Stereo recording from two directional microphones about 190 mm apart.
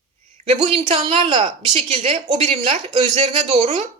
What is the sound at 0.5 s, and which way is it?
A woman's voice, 25° right (ahead or behind).